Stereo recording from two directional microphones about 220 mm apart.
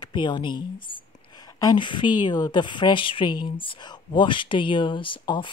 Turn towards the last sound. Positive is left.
turn(degrees=20)  # may be behind; listen again after turning